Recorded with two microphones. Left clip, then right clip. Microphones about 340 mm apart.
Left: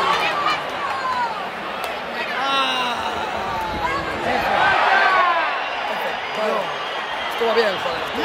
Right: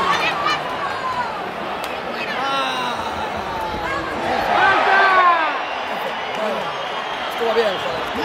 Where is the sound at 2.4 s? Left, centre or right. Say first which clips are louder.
Left 2 dB; centre.